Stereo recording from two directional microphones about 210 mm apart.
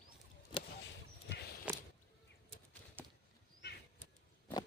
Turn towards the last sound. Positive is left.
turn(degrees=-10)  # may be behind; listen again after turning